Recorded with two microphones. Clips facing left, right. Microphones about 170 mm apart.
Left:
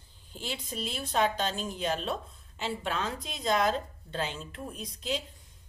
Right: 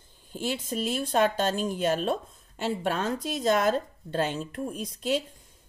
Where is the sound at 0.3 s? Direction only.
50° right (ahead or behind).